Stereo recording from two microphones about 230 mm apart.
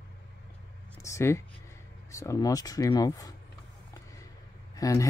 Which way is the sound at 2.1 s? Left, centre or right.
Centre.